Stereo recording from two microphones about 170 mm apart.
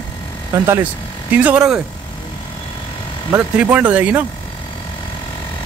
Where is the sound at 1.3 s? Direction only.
10° right (ahead or behind).